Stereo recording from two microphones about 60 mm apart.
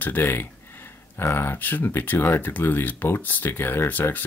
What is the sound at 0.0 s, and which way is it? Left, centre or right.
Speech, left.